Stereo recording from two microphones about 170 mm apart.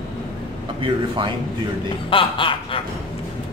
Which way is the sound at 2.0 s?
30° left (ahead or behind).